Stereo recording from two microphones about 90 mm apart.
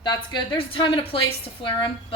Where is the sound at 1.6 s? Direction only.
65° left (ahead or behind).